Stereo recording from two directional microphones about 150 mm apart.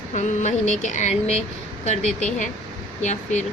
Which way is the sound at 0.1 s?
55° left (ahead or behind).